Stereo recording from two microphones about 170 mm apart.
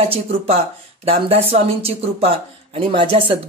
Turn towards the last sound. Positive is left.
turn(degrees=-35)  # may be behind; listen again after turning